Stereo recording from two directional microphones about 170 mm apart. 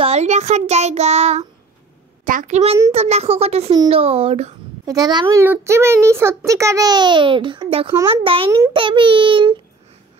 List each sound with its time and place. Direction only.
0.0 s child singing: 40° right (ahead or behind)
2.2 s a child's voice: 50° right (ahead or behind)
2.9 s child singing: 40° right (ahead or behind)
4.8 s a child's voice: 25° right (ahead or behind)
8.1 s child singing: 30° right (ahead or behind)
8.7 s a child's voice: 30° right (ahead or behind)